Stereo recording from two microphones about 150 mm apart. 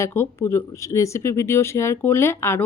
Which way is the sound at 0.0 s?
15° left (ahead or behind).